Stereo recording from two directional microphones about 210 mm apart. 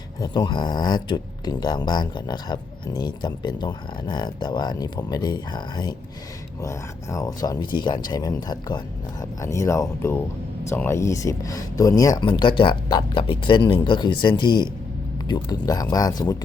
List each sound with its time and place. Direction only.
0.2 s speech: 20° left (ahead or behind)